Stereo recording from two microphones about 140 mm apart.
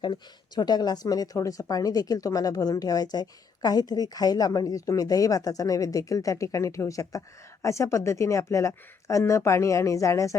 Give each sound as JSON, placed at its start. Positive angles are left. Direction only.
{"t": 0.0, "sound": "speech", "side_deg": 30}